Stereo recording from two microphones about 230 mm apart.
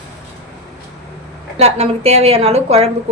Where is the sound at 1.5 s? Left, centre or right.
Right.